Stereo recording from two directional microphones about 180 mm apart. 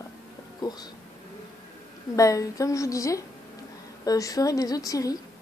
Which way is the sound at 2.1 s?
20° left (ahead or behind).